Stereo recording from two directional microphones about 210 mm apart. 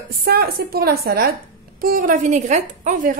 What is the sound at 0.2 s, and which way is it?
A woman's voice, 45° right (ahead or behind).